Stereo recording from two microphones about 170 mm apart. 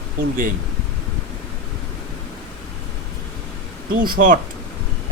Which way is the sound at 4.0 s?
55° right (ahead or behind).